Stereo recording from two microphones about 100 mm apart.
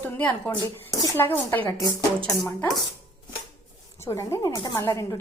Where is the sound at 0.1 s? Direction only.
20° left (ahead or behind).